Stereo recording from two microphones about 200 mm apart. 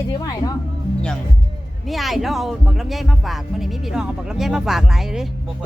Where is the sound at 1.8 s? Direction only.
Centre (ahead or behind).